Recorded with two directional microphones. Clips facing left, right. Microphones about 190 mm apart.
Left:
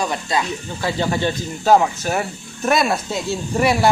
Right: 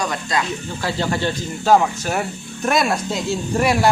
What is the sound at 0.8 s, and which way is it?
Speech, 10° left (ahead or behind).